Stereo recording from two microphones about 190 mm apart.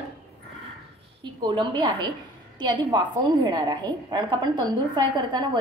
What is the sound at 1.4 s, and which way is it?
A woman's voice, 25° right (ahead or behind).